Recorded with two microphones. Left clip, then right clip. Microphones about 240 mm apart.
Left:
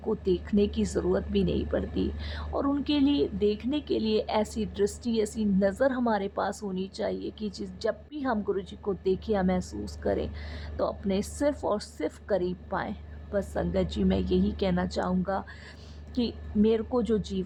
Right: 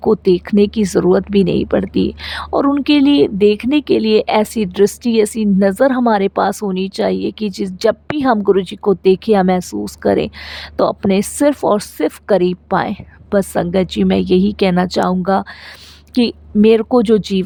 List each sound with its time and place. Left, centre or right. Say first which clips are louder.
0.0 s speech: right 15 dB; right